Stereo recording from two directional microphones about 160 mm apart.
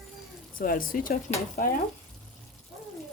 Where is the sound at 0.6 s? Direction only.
65° left (ahead or behind).